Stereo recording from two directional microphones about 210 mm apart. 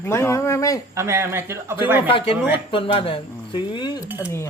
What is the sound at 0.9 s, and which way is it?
Speech, 15° right (ahead or behind).